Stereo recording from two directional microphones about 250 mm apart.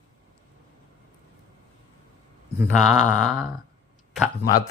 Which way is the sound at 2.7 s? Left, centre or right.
Centre.